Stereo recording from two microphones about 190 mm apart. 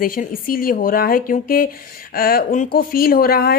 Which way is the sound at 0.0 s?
50° left (ahead or behind).